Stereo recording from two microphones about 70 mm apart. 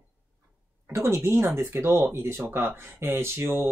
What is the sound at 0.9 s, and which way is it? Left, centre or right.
Speech, right.